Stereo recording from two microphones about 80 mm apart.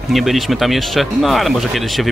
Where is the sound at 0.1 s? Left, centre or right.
Centre.